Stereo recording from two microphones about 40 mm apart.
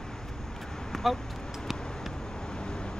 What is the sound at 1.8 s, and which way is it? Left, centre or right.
Vehicle, centre.